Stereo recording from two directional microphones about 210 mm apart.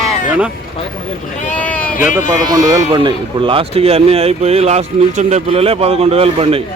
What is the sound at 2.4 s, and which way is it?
Speech, 15° right (ahead or behind).